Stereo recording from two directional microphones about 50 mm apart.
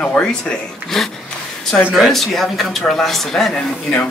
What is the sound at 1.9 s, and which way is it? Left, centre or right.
A man's voice, centre.